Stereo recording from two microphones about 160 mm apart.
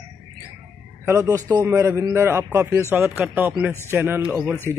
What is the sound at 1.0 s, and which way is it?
A man's voice, 20° right (ahead or behind).